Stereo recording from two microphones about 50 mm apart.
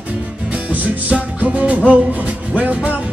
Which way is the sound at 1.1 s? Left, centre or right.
Right.